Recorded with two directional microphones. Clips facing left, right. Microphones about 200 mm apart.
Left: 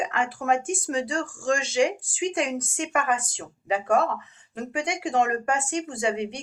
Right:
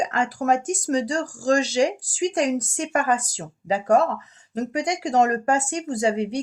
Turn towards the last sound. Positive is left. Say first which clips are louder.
# right 4 dB
turn(degrees=-40)  # may be behind; listen again after turning